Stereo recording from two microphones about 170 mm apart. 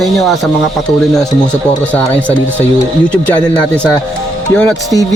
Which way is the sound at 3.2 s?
5° left (ahead or behind).